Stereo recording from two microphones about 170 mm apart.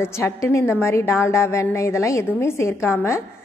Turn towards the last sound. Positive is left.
turn(degrees=15)  # may be behind; listen again after turning